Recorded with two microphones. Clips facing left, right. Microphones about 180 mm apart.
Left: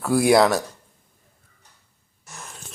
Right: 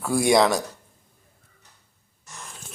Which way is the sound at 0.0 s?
Centre (ahead or behind).